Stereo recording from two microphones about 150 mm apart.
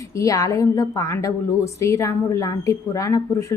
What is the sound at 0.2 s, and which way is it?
A woman's voice, 20° left (ahead or behind).